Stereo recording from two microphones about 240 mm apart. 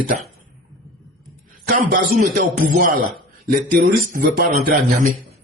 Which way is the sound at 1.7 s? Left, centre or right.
Right.